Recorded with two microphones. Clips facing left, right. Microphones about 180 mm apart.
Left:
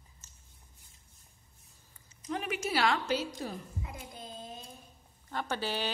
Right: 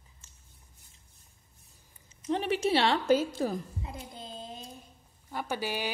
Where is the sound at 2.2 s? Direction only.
30° right (ahead or behind).